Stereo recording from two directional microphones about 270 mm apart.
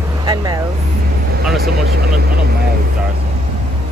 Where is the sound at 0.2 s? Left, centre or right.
Centre.